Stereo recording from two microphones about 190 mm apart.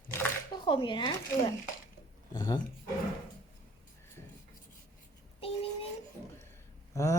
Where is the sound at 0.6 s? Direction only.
25° left (ahead or behind).